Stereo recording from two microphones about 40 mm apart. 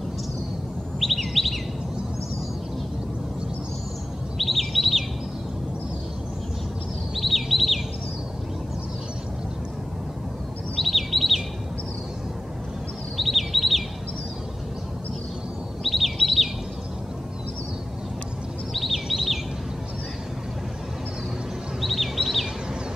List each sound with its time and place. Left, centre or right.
0.9 s chirp: centre
4.4 s chirp: centre
7.2 s chirp: centre
10.8 s chirp: centre
13.2 s chirp: centre
15.8 s chirp: centre
18.7 s bird: centre
19.0 s bird vocalization: centre
21.8 s bird vocalization: centre